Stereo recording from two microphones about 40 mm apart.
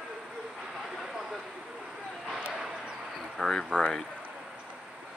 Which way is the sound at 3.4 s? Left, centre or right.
Centre.